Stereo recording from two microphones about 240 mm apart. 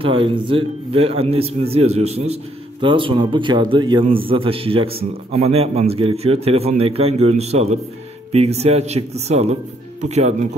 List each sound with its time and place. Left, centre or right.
0.0 s a man's voice: right